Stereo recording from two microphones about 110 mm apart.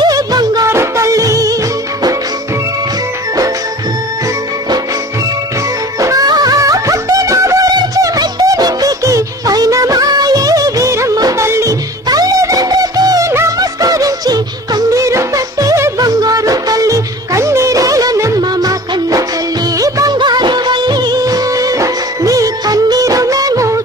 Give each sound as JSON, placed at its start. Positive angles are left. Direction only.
{"t": 0.0, "sound": "music", "side_deg": -35}
{"t": 0.7, "sound": "music", "side_deg": -25}
{"t": 5.9, "sound": "music", "side_deg": -30}
{"t": 19.8, "sound": "music of bollywood", "side_deg": -30}